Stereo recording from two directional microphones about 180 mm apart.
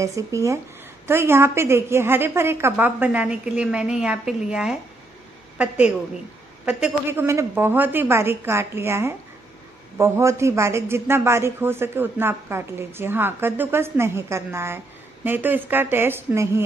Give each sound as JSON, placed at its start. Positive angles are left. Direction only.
{"t": 0.0, "sound": "a man's voice", "side_deg": -15}